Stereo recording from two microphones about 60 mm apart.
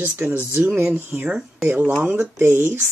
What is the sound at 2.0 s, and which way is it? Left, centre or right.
Speech, centre.